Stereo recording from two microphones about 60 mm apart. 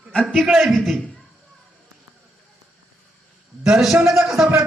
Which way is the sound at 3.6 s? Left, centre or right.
Centre.